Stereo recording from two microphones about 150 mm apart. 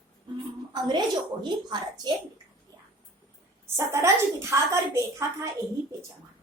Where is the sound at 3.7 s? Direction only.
20° right (ahead or behind).